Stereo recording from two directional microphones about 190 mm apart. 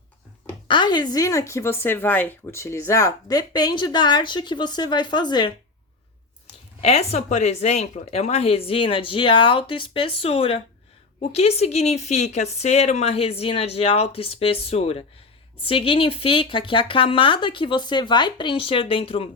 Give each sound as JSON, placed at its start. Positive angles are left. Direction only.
{"t": 0.7, "sound": "speech", "side_deg": 25}
{"t": 6.8, "sound": "speech", "side_deg": 35}